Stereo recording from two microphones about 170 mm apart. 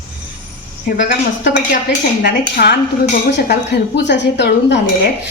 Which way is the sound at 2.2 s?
75° left (ahead or behind).